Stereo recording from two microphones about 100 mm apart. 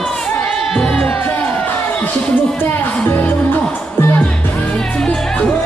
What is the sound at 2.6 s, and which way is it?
Music, 20° left (ahead or behind).